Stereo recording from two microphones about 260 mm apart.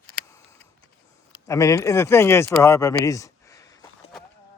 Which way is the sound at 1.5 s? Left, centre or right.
Centre.